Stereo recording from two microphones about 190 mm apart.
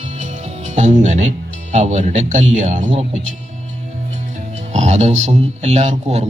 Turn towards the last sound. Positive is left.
turn(degrees=-35)  # may be behind; listen again after turning